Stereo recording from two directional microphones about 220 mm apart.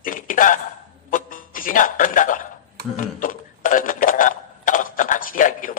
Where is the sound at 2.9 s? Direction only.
40° left (ahead or behind).